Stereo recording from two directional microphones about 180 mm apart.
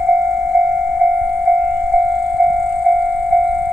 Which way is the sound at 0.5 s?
15° right (ahead or behind).